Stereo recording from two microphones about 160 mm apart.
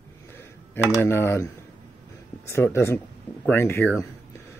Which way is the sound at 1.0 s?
15° left (ahead or behind).